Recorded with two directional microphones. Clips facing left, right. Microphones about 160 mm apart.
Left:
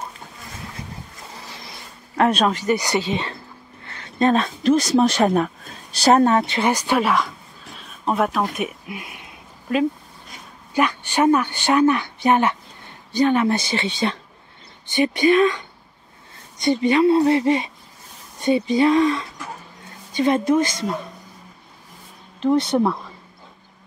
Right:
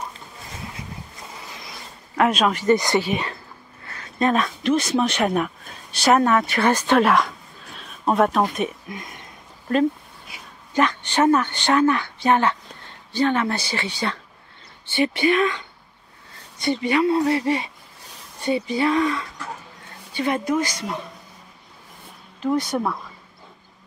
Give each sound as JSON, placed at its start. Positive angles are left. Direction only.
{"t": 2.1, "sound": "speech", "side_deg": 35}
{"t": 2.5, "sound": "speech", "side_deg": 15}
{"t": 7.0, "sound": "speech", "side_deg": 0}
{"t": 8.5, "sound": "a sound", "side_deg": 10}
{"t": 10.7, "sound": "speech", "side_deg": 10}
{"t": 22.4, "sound": "speech", "side_deg": 25}